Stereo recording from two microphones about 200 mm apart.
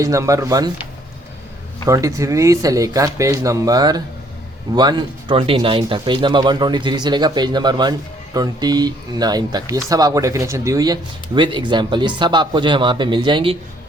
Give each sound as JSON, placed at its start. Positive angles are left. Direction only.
{"t": 0.0, "sound": "speech", "side_deg": -15}